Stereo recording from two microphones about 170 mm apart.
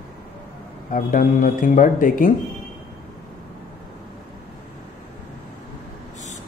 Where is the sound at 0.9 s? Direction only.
50° left (ahead or behind).